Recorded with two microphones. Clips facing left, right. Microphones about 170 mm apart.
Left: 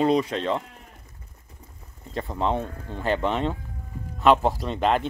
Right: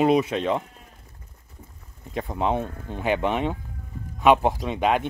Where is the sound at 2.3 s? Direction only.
10° right (ahead or behind).